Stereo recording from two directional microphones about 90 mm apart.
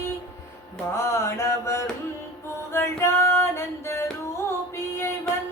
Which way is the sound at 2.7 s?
30° left (ahead or behind).